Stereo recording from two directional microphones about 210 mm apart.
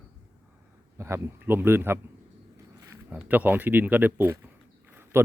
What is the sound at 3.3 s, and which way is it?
Speech, 10° right (ahead or behind).